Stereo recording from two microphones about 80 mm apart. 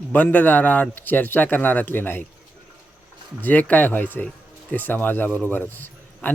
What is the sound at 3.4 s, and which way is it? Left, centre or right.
Speech, centre.